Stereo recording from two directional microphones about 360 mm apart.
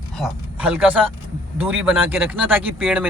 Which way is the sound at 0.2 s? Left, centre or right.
Centre.